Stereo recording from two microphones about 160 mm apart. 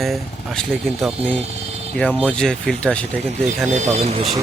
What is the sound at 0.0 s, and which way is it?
Speech, centre (ahead or behind).